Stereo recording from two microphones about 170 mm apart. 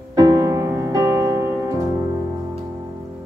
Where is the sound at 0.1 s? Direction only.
20° right (ahead or behind).